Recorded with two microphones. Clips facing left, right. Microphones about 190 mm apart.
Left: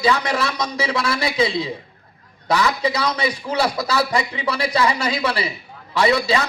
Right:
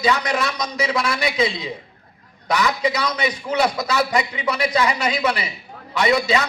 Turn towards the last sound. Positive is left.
turn(degrees=30)  # may be behind; listen again after turning